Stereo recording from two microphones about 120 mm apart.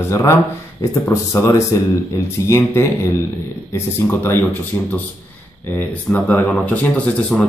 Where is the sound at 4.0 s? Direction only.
20° left (ahead or behind).